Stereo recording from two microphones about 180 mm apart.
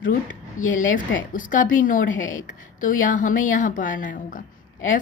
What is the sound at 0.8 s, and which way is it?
A woman's voice, 50° left (ahead or behind).